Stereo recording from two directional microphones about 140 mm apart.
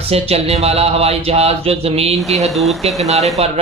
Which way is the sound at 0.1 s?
45° right (ahead or behind).